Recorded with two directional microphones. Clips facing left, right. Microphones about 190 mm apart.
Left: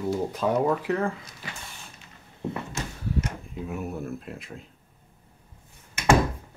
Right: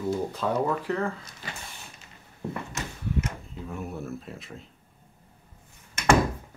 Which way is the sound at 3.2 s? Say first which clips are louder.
Left 3 dB; 10° left (ahead or behind).